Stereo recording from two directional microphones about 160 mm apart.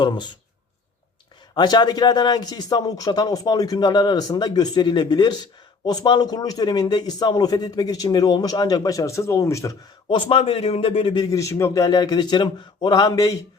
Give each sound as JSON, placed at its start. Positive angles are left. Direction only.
{"t": 0.0, "sound": "a man's voice", "side_deg": 30}
{"t": 1.5, "sound": "a man's voice", "side_deg": 25}
{"t": 10.1, "sound": "a man's voice", "side_deg": 35}